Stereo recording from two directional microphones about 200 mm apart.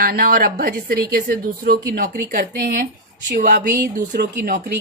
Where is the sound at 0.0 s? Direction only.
45° right (ahead or behind).